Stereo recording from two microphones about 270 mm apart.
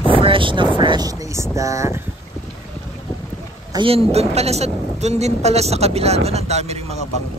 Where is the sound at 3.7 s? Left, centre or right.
Centre.